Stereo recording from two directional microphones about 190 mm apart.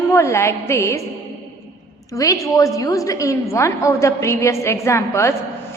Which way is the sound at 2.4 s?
15° left (ahead or behind).